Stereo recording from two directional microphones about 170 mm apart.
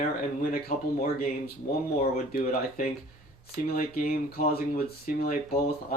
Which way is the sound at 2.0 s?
55° left (ahead or behind).